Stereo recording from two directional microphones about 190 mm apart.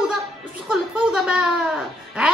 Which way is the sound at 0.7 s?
5° right (ahead or behind).